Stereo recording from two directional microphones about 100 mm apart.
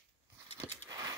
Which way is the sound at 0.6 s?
40° right (ahead or behind).